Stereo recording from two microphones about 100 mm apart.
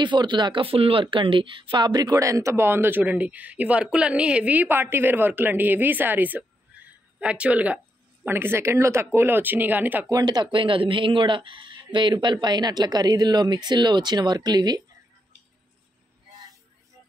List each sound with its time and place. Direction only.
0.0 s speech: 50° right (ahead or behind); by 1.0 s 70° right (ahead or behind)
1.0 s speech: 55° right (ahead or behind); by 10.0 s 20° right (ahead or behind)
10.0 s speech: 40° right (ahead or behind)